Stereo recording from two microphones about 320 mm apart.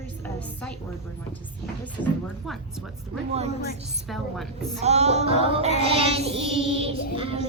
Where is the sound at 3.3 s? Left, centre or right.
Centre.